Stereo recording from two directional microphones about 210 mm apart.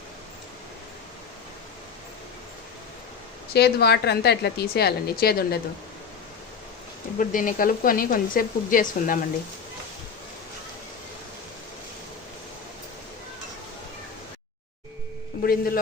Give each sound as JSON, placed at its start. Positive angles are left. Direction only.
{"t": 3.5, "sound": "a woman's voice", "side_deg": 50}
{"t": 7.2, "sound": "speech", "side_deg": 40}
{"t": 15.4, "sound": "a woman's voice", "side_deg": 45}